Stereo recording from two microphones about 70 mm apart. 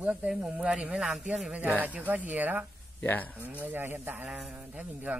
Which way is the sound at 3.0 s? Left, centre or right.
Left.